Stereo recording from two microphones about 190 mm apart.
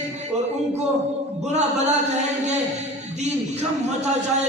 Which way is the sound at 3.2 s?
35° right (ahead or behind).